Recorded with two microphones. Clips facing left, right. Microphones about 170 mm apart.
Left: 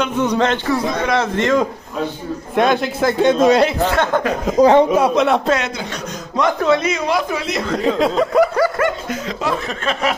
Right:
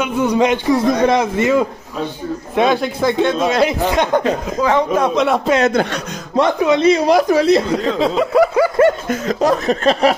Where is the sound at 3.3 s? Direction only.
40° left (ahead or behind).